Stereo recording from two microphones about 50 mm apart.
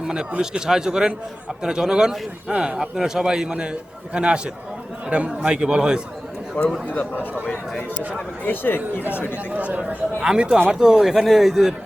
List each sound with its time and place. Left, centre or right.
0.1 s a man's voice: centre
6.6 s a man's voice: left
8.4 s speech: left
9.5 s a man's voice: right; by 11.7 s centre